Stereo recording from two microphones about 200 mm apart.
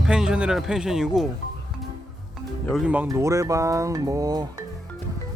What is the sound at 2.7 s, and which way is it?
Speech, 5° right (ahead or behind).